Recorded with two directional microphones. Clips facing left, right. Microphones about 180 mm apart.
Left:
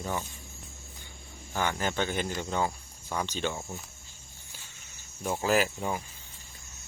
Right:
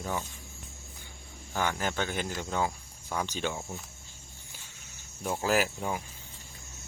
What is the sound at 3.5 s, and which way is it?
Speech, centre (ahead or behind).